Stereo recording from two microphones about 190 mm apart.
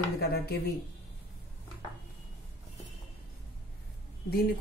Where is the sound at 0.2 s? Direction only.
55° left (ahead or behind).